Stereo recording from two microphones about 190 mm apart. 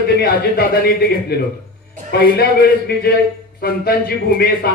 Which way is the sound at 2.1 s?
55° left (ahead or behind).